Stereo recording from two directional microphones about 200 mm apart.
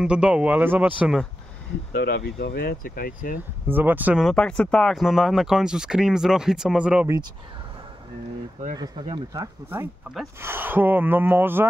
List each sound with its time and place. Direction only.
0.0 s speech: 5° right (ahead or behind)
1.9 s speech: 55° left (ahead or behind)
3.6 s speech: 10° right (ahead or behind)
8.7 s speech: 20° right (ahead or behind)